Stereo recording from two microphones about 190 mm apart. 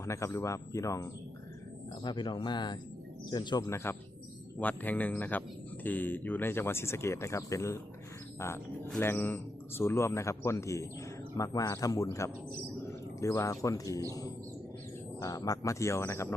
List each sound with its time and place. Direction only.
0.0 s speech: 15° left (ahead or behind)
4.6 s speech: 10° left (ahead or behind)
8.9 s speech: 10° left (ahead or behind)
15.2 s speech: 20° left (ahead or behind)